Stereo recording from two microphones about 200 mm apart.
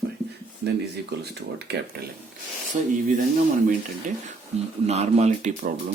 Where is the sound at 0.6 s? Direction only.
55° right (ahead or behind).